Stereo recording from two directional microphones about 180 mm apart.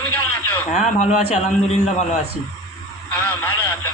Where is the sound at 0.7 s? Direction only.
40° left (ahead or behind).